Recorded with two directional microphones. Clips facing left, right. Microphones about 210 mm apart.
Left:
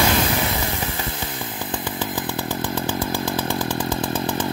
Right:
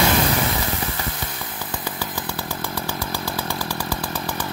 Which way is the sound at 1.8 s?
15° left (ahead or behind).